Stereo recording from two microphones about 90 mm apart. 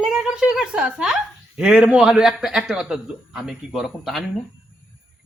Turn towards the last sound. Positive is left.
turn(degrees=-5)  # may be behind; listen again after turning